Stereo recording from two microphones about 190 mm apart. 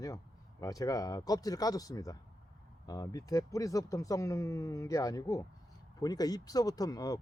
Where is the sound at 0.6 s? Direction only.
20° left (ahead or behind).